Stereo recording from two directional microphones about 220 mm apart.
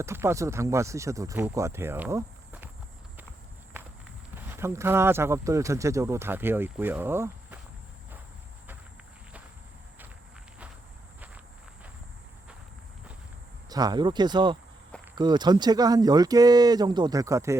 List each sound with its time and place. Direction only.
0.0 s speech: 10° right (ahead or behind)
4.5 s speech: 10° right (ahead or behind)
13.7 s speech: 15° right (ahead or behind)